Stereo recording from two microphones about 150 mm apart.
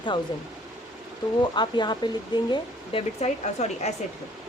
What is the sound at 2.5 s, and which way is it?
Speech, 40° left (ahead or behind).